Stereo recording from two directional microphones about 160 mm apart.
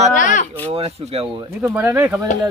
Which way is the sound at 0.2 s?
50° left (ahead or behind).